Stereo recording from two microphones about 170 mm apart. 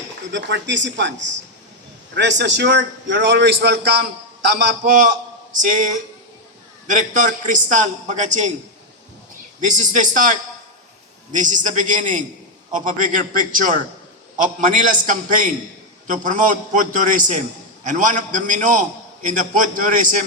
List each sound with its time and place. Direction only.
0.3 s a man's voice: 90° right
4.5 s a man's voice: 45° right (ahead or behind)
9.6 s a man's voice: 45° right (ahead or behind)